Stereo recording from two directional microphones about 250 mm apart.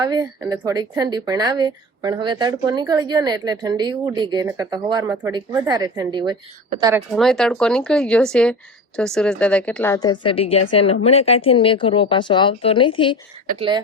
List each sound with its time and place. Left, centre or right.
0.0 s a woman's voice: centre
7.2 s a woman's voice: centre
13.6 s speech: centre